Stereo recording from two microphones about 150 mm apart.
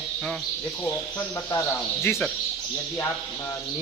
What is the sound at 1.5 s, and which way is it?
Speech, 15° left (ahead or behind).